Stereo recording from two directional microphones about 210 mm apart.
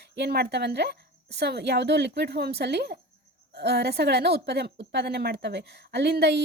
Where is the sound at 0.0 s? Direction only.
50° right (ahead or behind).